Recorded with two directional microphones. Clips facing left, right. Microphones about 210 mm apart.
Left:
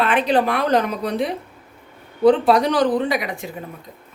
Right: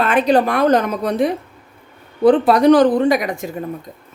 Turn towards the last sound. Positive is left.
turn(degrees=-45)  # may be behind; listen again after turning